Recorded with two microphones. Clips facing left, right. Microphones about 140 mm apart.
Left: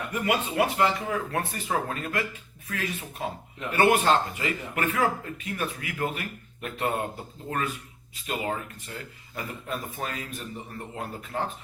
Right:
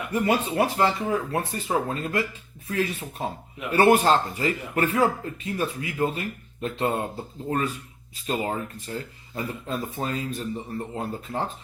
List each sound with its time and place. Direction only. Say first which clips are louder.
0.1 s speech: right 4 dB; 30° right (ahead or behind)
8.1 s speech: right 3 dB; 35° right (ahead or behind)